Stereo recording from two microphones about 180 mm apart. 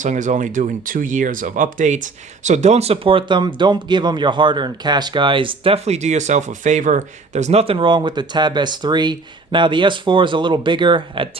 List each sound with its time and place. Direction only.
0.0 s speech: 45° right (ahead or behind); by 11.3 s 30° right (ahead or behind)